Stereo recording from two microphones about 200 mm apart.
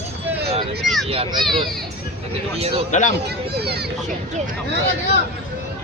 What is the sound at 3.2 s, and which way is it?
Speech, 55° right (ahead or behind).